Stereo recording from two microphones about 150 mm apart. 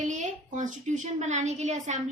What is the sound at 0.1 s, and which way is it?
A woman's voice, 55° right (ahead or behind).